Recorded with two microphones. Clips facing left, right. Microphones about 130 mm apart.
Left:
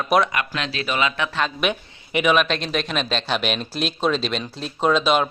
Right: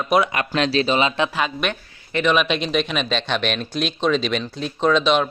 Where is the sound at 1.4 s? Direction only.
5° right (ahead or behind).